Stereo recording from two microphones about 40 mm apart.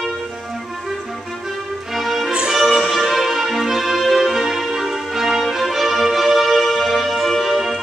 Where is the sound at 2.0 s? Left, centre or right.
Centre.